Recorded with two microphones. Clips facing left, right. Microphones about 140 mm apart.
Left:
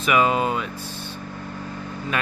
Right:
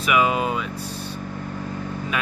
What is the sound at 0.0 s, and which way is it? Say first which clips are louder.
Speech: left 1 dB; 5° right (ahead or behind).